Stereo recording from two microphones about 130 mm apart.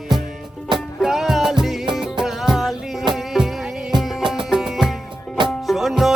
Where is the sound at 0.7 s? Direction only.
35° right (ahead or behind).